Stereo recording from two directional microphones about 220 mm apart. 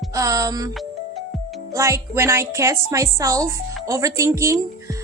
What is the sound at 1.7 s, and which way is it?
A woman's voice, 15° right (ahead or behind).